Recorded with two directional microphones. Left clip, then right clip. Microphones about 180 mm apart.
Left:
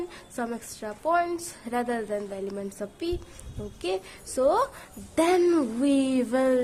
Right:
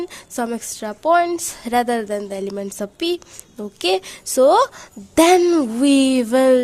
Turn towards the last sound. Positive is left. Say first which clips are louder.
# right 9 dB
turn(degrees=-50)  # may be behind; listen again after turning